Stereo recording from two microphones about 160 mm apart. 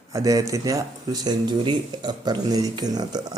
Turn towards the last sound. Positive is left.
turn(degrees=-25)  # may be behind; listen again after turning